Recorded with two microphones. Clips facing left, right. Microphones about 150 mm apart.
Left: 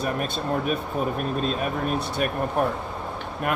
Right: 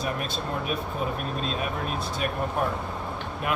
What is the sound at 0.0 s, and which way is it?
Speech, 45° left (ahead or behind).